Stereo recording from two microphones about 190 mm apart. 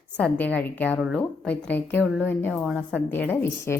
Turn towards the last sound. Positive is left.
turn(degrees=10)  # may be behind; listen again after turning